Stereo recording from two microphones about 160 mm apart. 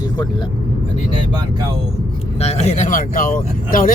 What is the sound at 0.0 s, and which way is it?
Speech, 30° left (ahead or behind).